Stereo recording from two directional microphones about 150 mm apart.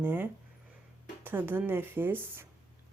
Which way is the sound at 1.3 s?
15° right (ahead or behind).